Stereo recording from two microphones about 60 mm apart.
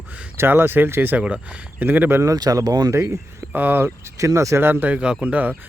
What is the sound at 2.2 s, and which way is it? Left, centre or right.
Speech, right.